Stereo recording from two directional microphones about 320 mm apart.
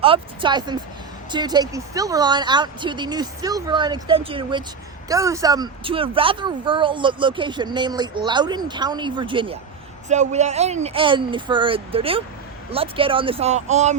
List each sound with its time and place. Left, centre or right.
0.0 s speech: centre